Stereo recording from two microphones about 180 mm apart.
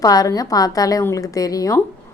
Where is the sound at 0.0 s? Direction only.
20° left (ahead or behind).